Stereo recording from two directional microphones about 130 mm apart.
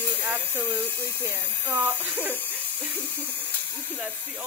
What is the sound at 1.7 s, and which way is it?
Speech, 10° right (ahead or behind).